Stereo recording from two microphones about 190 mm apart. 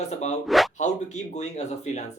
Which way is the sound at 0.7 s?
40° left (ahead or behind).